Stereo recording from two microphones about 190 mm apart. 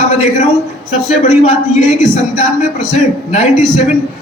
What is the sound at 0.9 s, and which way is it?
A man's voice, 40° left (ahead or behind).